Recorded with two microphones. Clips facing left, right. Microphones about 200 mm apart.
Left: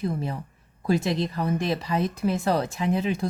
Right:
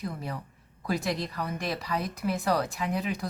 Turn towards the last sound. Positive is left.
turn(degrees=25)  # may be behind; listen again after turning